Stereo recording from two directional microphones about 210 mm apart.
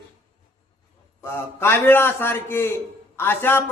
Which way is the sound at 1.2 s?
10° left (ahead or behind).